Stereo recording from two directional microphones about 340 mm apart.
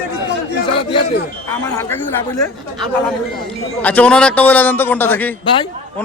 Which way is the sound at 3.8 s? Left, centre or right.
Centre.